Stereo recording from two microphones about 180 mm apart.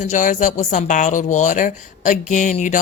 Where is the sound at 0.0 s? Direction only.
45° left (ahead or behind).